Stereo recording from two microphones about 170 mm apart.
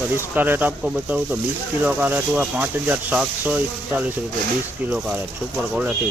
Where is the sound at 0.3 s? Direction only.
10° right (ahead or behind).